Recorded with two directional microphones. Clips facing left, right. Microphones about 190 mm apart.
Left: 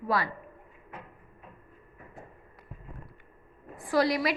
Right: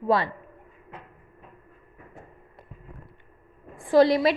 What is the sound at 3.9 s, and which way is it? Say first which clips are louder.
Speech: right 7 dB; 25° right (ahead or behind).